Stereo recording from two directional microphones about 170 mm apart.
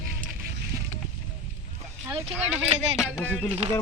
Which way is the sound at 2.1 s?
10° right (ahead or behind).